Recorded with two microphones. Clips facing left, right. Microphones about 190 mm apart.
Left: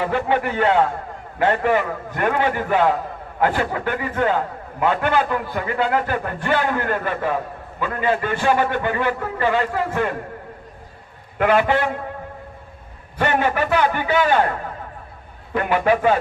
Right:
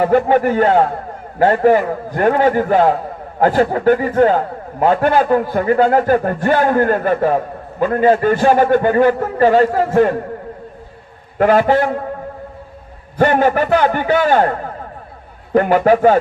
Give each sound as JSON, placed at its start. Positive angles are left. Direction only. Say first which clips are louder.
{"t": 0.0, "sound": "a man's voice", "louder": "right 8 dB", "side_deg": -45}
{"t": 11.3, "sound": "a man's voice", "louder": "right 5 dB", "side_deg": -40}
{"t": 13.1, "sound": "a man's voice", "louder": "right 7 dB", "side_deg": -40}